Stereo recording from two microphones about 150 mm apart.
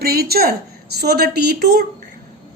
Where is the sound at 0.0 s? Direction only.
90° right.